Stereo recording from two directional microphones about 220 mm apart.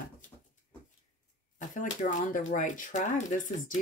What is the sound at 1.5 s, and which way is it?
Speech, 35° left (ahead or behind).